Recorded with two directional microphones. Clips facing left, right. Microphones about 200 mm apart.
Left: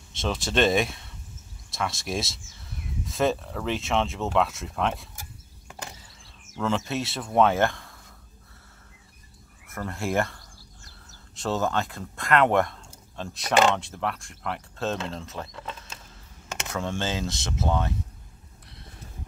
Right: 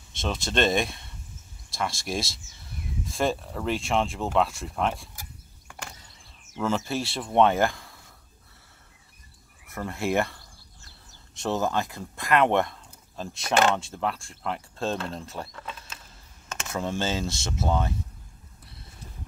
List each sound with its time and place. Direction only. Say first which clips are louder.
0.2 s speech: left 2 dB; 5° left (ahead or behind)
5.7 s vehicle: left 2 dB; 20° left (ahead or behind)
6.5 s speech: even; 5° right (ahead or behind)
7.7 s a sound: left 1 dB; centre (ahead or behind)
9.7 s speech: right 2 dB; centre (ahead or behind)
11.6 s speech: even; centre (ahead or behind)
14.1 s speech: even; 30° right (ahead or behind)
14.9 s speech: even; centre (ahead or behind)
16.7 s speech: right 1 dB; 5° right (ahead or behind)